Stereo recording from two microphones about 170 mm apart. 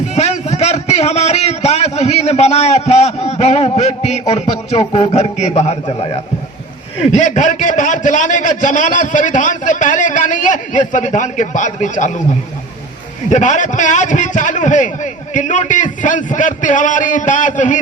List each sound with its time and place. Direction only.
0.1 s a sound: 40° left (ahead or behind)
7.1 s a man's voice: 45° left (ahead or behind)
13.3 s a man's voice: 45° left (ahead or behind)